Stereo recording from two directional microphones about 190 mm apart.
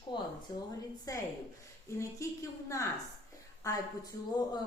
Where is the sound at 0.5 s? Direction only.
20° left (ahead or behind).